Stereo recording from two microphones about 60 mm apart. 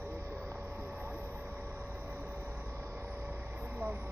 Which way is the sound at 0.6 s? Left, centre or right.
Right.